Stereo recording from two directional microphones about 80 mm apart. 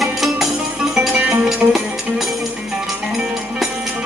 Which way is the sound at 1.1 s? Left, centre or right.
Centre.